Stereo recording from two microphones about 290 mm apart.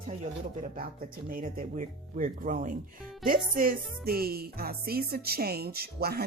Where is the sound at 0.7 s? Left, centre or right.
Right.